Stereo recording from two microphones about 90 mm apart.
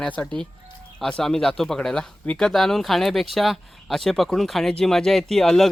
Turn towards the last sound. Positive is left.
turn(degrees=5)  # may be behind; listen again after turning